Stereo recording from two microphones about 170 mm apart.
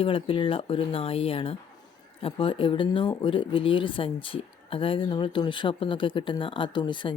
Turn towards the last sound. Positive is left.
turn(degrees=25)  # may be behind; listen again after turning